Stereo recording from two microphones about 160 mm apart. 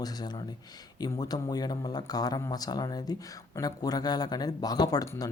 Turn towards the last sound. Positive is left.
turn(degrees=25)  # may be behind; listen again after turning